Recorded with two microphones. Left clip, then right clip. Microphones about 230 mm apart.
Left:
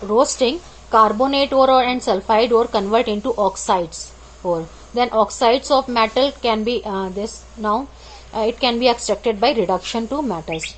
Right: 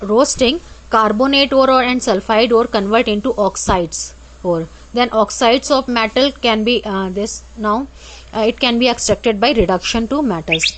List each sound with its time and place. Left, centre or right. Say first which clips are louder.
0.1 s a woman's voice: right 3 dB; right